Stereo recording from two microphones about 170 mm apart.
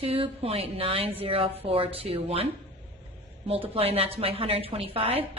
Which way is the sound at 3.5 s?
35° right (ahead or behind).